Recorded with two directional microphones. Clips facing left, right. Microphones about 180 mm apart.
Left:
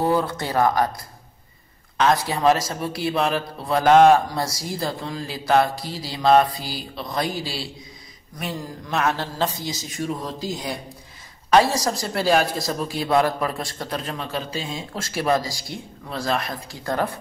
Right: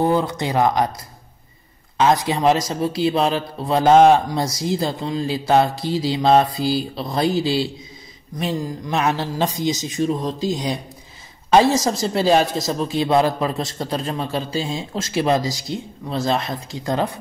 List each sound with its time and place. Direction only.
0.0 s speech: 20° right (ahead or behind)
2.0 s a man's voice: 20° right (ahead or behind)